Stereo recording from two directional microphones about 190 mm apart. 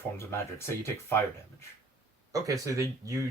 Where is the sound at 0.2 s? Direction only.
15° left (ahead or behind).